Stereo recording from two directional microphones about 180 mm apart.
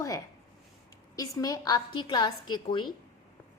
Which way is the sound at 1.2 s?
20° left (ahead or behind).